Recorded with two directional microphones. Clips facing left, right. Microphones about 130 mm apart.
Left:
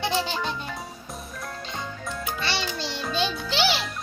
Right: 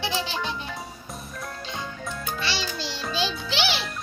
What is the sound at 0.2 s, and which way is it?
Music, centre (ahead or behind).